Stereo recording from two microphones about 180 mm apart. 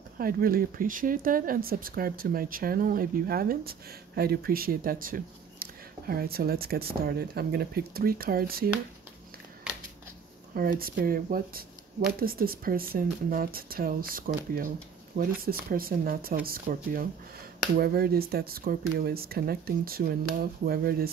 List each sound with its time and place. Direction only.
0.2 s speech: 55° right (ahead or behind)
10.5 s speech: 55° right (ahead or behind)